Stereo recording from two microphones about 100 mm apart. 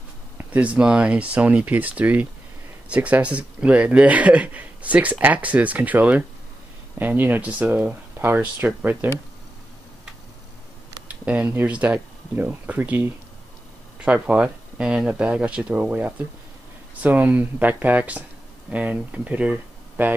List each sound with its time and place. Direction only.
0.4 s speech: 15° right (ahead or behind)
11.1 s speech: 15° right (ahead or behind)